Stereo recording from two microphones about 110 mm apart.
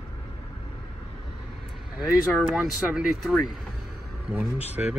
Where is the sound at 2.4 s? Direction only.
5° right (ahead or behind).